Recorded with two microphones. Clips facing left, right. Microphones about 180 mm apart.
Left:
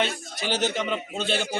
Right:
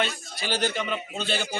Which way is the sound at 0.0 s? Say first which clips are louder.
Left 2 dB; 20° left (ahead or behind).